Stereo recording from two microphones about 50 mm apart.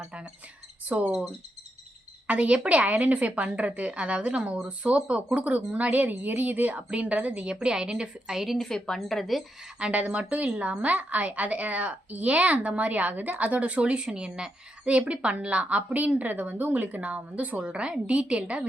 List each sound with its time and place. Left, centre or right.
0.9 s a woman's voice: right
2.2 s a woman's voice: right
6.7 s a woman's voice: right; by 8.5 s centre
8.5 s a woman's voice: centre
9.7 s a woman's voice: right